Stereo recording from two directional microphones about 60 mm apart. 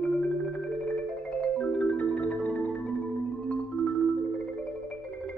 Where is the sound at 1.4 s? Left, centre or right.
Centre.